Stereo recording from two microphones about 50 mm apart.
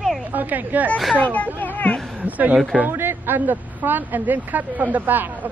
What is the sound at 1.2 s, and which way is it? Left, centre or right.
Speech, left.